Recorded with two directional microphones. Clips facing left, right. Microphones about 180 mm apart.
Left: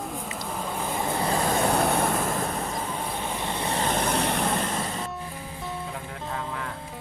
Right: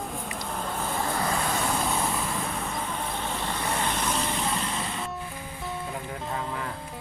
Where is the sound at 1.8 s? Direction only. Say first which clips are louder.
Left 4 dB; 60° left (ahead or behind).